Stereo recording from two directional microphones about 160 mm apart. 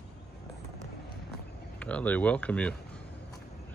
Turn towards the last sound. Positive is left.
turn(degrees=10)  # may be behind; listen again after turning